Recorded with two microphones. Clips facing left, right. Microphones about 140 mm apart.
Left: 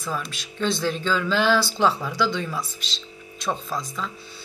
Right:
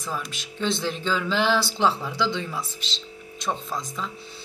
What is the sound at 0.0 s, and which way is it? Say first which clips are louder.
Speech: left 2 dB; 15° right (ahead or behind).